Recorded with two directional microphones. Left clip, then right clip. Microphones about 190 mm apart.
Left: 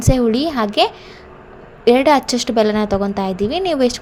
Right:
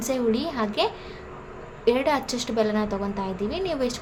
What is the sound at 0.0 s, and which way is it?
A woman's voice, 40° left (ahead or behind).